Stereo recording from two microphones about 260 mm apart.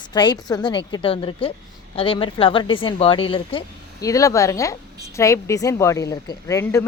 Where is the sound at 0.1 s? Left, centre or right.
Centre.